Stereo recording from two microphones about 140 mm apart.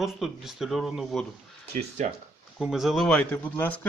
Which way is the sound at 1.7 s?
55° right (ahead or behind).